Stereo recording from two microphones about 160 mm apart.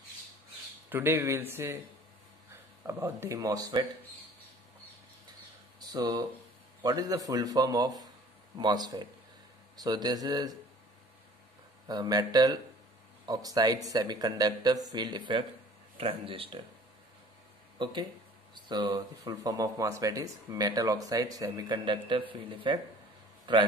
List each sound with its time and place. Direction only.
0.8 s speech: 15° right (ahead or behind)
2.8 s speech: 15° right (ahead or behind)
5.8 s speech: 25° right (ahead or behind)
11.9 s speech: 25° right (ahead or behind)
17.8 s speech: 30° right (ahead or behind)